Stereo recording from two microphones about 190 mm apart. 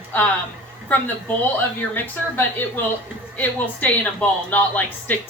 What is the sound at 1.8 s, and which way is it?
Speech, 10° left (ahead or behind).